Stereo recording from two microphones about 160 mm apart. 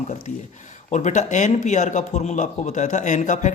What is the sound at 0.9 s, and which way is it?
A man's voice, 50° left (ahead or behind).